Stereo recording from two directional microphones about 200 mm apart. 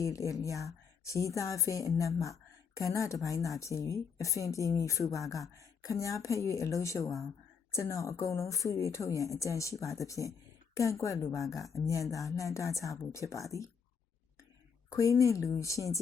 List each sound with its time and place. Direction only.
0.0 s a woman's voice: 15° left (ahead or behind)
11.4 s speech: centre (ahead or behind)
12.4 s a woman's voice: 15° left (ahead or behind)
14.8 s a woman's voice: 15° left (ahead or behind)